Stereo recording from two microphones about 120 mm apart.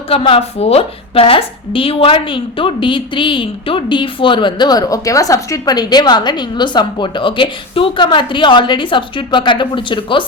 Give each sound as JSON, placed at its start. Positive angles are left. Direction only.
{"t": 0.1, "sound": "a woman's voice", "side_deg": 55}